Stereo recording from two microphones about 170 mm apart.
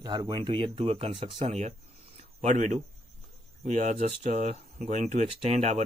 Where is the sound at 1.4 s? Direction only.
40° right (ahead or behind).